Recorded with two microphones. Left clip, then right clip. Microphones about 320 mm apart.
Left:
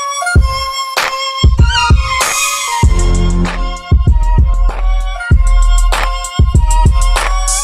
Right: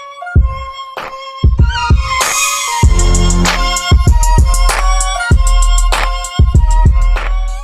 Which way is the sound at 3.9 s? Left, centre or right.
Right.